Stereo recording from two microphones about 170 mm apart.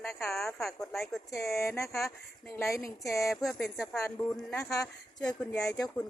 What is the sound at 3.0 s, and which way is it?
A woman's voice, 20° left (ahead or behind).